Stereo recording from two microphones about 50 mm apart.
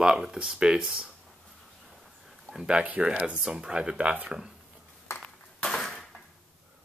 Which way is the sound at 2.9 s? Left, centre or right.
Right.